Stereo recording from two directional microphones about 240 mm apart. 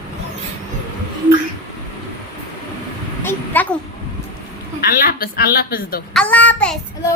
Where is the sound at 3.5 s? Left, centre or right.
Centre.